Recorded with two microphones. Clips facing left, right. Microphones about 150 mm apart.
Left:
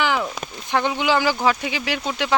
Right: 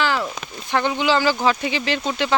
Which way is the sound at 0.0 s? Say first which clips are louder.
Even; 15° left (ahead or behind).